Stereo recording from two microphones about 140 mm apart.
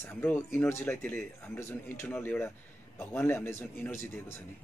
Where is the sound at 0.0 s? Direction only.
15° left (ahead or behind).